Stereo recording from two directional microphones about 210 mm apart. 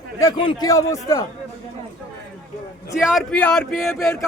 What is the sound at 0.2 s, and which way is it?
Speech, 20° left (ahead or behind).